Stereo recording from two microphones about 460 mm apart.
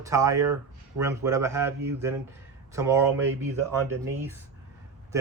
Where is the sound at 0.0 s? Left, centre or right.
Centre.